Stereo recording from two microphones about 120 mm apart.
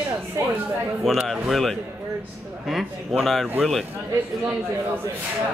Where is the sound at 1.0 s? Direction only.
Centre (ahead or behind).